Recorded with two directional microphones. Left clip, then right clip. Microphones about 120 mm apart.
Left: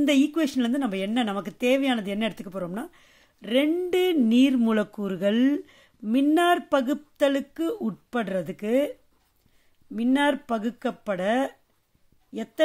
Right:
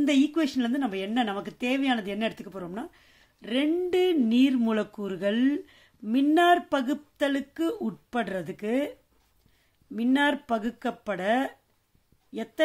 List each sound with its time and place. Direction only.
0.0 s speech: 30° left (ahead or behind)
9.9 s speech: 25° left (ahead or behind)